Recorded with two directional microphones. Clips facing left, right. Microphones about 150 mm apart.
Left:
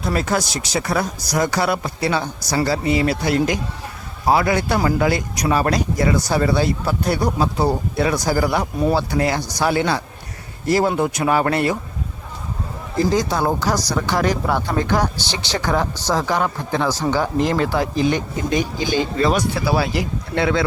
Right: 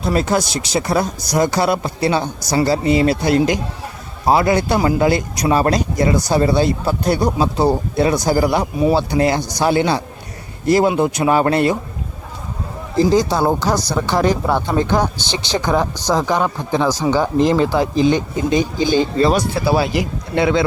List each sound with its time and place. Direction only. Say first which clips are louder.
0.0 s speech: right 3 dB; 25° right (ahead or behind)
13.0 s speech: right 4 dB; 30° right (ahead or behind)